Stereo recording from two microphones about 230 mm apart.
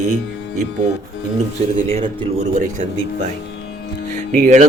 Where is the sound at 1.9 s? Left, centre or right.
Right.